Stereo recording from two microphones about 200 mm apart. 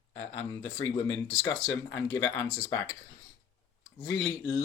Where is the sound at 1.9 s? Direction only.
15° left (ahead or behind).